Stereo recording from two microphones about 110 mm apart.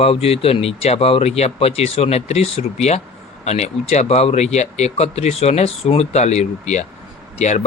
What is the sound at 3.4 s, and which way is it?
Speech, 80° left.